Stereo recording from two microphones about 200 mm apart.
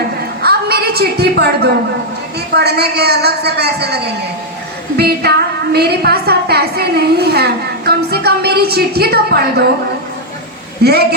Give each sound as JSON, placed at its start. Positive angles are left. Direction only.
{"t": 0.4, "sound": "a sound", "side_deg": -50}
{"t": 2.6, "sound": "a woman's voice", "side_deg": -55}
{"t": 10.8, "sound": "a woman's voice", "side_deg": -50}